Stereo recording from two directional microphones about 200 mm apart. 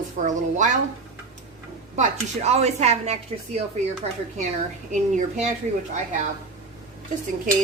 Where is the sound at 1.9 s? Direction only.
35° right (ahead or behind).